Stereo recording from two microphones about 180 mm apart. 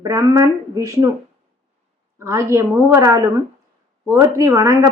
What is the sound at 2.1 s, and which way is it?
A woman's voice, 15° right (ahead or behind).